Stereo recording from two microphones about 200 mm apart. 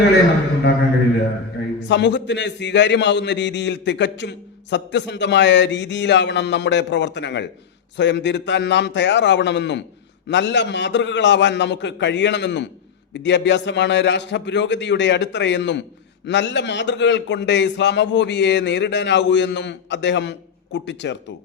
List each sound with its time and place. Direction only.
1.9 s a man's voice: 60° left (ahead or behind)